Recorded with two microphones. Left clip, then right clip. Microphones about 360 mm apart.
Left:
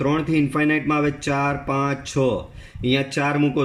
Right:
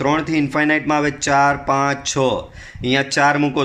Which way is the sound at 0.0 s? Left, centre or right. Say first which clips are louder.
Right 3 dB; centre.